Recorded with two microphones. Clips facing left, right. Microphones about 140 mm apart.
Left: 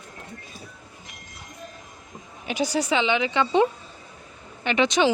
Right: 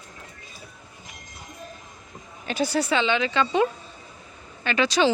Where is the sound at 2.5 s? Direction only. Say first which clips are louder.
Even; 15° left (ahead or behind).